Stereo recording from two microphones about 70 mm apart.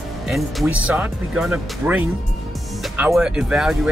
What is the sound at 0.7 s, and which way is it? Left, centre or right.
Speech, centre.